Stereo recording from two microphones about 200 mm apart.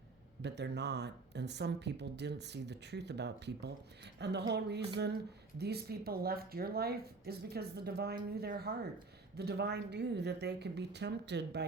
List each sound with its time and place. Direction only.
0.4 s speech: 55° right (ahead or behind)